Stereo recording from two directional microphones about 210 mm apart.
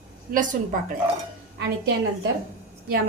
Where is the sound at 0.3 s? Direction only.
40° right (ahead or behind).